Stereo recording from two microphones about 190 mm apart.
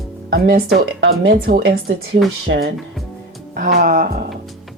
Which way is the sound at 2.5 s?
70° right (ahead or behind).